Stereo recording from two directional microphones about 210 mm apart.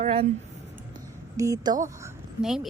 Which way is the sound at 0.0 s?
25° right (ahead or behind).